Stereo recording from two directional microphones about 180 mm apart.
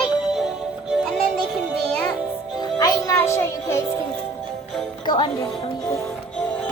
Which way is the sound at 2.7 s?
20° left (ahead or behind).